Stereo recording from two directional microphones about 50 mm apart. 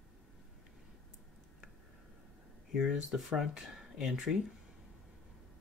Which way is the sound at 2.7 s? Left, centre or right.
Centre.